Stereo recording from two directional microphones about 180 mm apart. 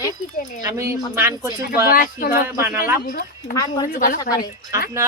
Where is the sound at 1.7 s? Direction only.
55° left (ahead or behind).